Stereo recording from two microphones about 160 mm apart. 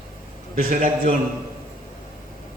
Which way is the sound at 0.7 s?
50° right (ahead or behind).